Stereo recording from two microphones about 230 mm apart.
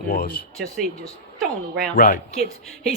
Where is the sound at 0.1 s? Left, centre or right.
Left.